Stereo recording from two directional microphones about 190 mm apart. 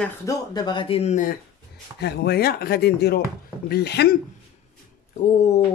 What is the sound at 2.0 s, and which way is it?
Speech, 60° left (ahead or behind).